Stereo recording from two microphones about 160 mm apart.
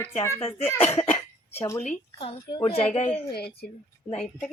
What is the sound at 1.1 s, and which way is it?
Cough, 40° left (ahead or behind).